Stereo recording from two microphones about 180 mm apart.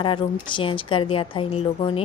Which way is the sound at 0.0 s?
30° left (ahead or behind).